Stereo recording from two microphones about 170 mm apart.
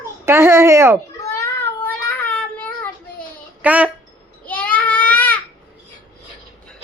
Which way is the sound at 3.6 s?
10° right (ahead or behind).